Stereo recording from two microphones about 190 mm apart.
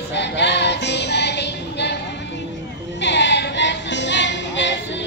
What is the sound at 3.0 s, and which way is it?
Music, 65° left (ahead or behind).